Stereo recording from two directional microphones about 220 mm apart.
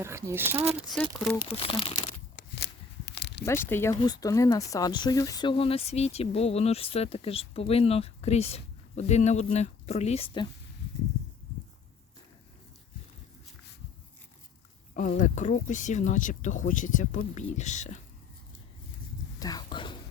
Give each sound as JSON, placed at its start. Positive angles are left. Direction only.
{"t": 0.0, "sound": "speech", "side_deg": -10}
{"t": 0.9, "sound": "speech", "side_deg": 0}
{"t": 1.5, "sound": "speech", "side_deg": 25}
{"t": 3.1, "sound": "a sound", "side_deg": 50}
{"t": 3.4, "sound": "speech", "side_deg": 10}
{"t": 14.9, "sound": "speech", "side_deg": 35}
{"t": 19.4, "sound": "a sound", "side_deg": 15}